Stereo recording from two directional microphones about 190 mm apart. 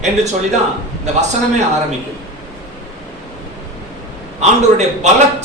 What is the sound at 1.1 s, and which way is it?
Speech, 40° right (ahead or behind).